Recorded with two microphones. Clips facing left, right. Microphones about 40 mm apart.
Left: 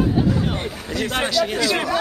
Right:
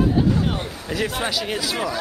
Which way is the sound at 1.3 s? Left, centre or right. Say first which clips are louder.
Left 5 dB; centre.